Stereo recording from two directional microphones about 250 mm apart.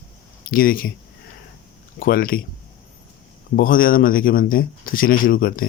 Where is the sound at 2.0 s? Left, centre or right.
Left.